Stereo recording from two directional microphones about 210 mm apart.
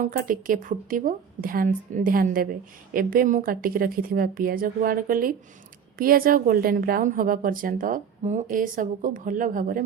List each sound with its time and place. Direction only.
0.0 s a woman's voice: 40° right (ahead or behind)